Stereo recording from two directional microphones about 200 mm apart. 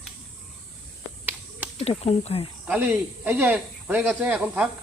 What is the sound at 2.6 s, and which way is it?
Speech, 10° right (ahead or behind).